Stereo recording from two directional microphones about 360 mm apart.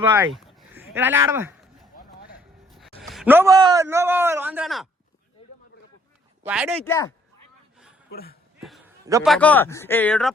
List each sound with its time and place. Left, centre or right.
0.0 s a sound: centre
3.0 s a man's voice: centre
6.4 s a man's voice: centre
8.1 s speech: left
8.6 s a man's voice: centre